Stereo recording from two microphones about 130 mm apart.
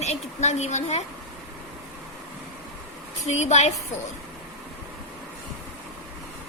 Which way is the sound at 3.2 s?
60° left (ahead or behind).